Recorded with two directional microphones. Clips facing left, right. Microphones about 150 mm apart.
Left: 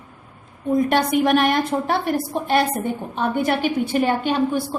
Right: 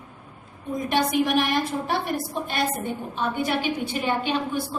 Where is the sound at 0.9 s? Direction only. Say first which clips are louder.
Left 1 dB; 60° left (ahead or behind).